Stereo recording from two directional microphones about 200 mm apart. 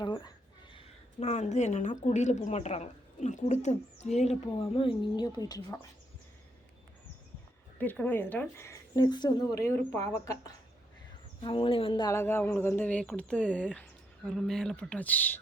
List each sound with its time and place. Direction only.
0.0 s speech: 20° left (ahead or behind)
0.8 s a woman's voice: 35° left (ahead or behind); by 5.8 s 20° left (ahead or behind)
7.8 s a woman's voice: 10° left (ahead or behind)